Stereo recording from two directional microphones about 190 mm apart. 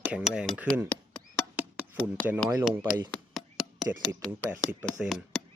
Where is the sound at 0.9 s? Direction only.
5° left (ahead or behind).